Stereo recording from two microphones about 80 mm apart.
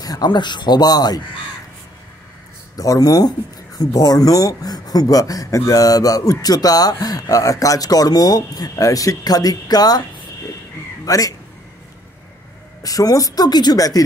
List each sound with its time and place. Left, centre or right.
0.0 s speech: left
2.7 s speech: left
11.1 s speech: left
12.8 s speech: left